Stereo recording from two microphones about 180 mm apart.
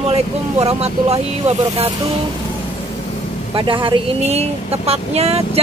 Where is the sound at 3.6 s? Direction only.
30° right (ahead or behind).